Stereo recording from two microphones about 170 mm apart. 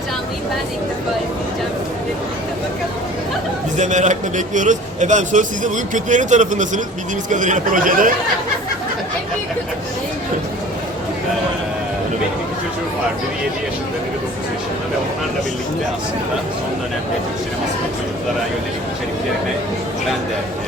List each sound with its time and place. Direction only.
3.8 s a man's voice: 45° right (ahead or behind)